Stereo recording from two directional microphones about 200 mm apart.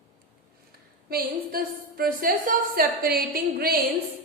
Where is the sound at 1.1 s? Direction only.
45° right (ahead or behind).